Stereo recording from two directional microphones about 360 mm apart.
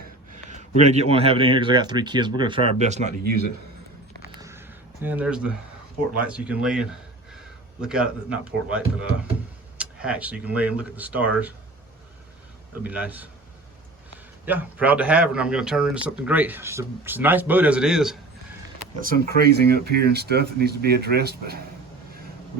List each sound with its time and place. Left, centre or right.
0.5 s speech: centre
4.4 s a sound: centre
5.0 s speech: centre
12.8 s speech: centre
14.4 s speech: centre
19.4 s speech: right